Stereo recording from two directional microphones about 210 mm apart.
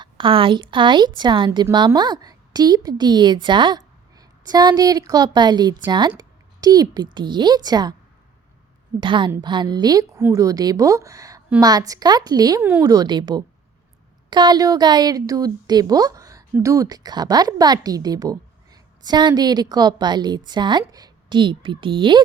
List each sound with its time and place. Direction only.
0.0 s a woman's voice: 25° right (ahead or behind)
9.0 s speech: 20° right (ahead or behind)